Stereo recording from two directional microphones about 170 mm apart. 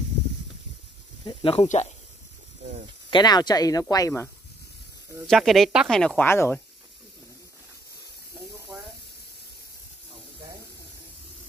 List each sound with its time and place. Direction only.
1.2 s speech: 30° left (ahead or behind)
3.1 s speech: 25° left (ahead or behind)
5.2 s speech: centre (ahead or behind)
8.7 s hiss: 5° right (ahead or behind)